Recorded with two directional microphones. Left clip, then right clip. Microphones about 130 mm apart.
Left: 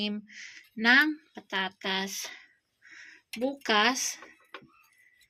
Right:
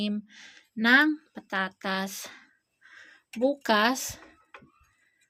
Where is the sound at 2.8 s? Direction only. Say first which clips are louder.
Left 1 dB; 65° right (ahead or behind); by 4.2 s 80° right.